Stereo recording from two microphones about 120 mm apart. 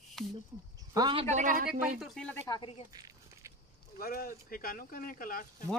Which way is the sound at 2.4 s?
35° left (ahead or behind).